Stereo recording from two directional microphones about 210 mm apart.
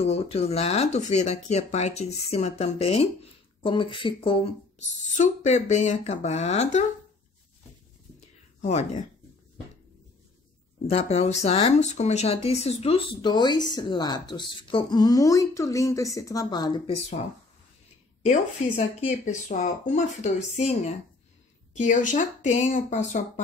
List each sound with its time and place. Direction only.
0.0 s speech: 30° left (ahead or behind)
5.1 s speech: 35° left (ahead or behind)
8.5 s speech: 35° left (ahead or behind)
10.9 s speech: 30° left (ahead or behind)